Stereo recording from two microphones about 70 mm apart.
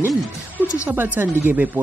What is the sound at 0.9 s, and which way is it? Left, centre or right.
Speech, right.